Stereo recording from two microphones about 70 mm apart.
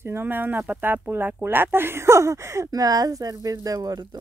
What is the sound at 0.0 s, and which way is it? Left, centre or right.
Speech, right.